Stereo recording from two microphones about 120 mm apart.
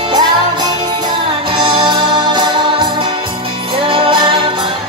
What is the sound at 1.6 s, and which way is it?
Music, 40° right (ahead or behind).